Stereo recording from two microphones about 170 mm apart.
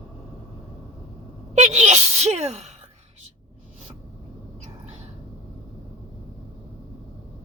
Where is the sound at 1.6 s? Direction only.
40° right (ahead or behind).